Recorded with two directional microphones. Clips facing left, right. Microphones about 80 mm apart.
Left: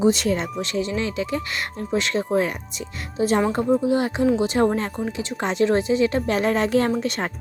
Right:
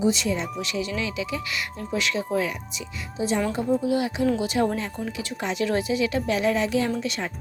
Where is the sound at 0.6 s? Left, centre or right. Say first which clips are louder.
Left 4 dB; left.